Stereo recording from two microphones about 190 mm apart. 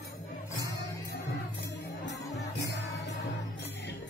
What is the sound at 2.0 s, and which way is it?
Music, 65° left (ahead or behind).